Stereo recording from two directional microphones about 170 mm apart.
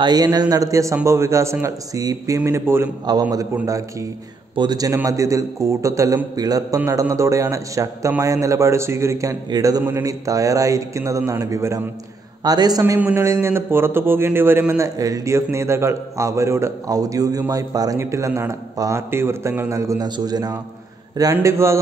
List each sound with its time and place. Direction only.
0.0 s a man's voice: 25° right (ahead or behind)